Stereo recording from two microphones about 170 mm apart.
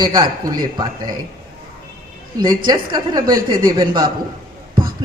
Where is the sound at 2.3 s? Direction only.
25° right (ahead or behind).